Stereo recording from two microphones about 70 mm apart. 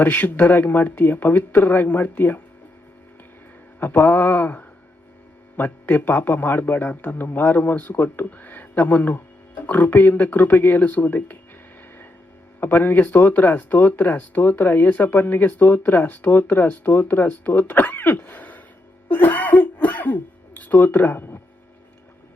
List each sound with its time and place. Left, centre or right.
0.0 s speech: left
3.8 s speech: left
12.5 s speech: left